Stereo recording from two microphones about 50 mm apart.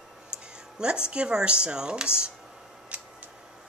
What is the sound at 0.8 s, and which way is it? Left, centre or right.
Speech, centre.